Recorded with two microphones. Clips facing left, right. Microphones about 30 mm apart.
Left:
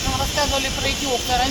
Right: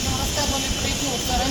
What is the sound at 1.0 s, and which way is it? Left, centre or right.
Speech, centre.